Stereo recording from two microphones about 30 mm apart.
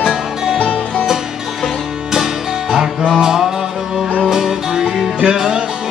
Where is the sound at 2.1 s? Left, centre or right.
Centre.